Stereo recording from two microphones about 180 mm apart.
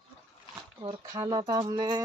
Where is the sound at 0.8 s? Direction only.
25° right (ahead or behind).